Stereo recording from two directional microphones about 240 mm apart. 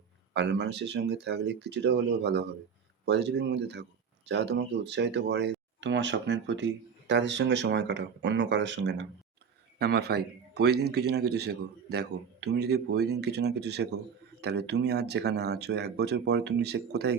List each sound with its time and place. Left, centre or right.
0.3 s speech: right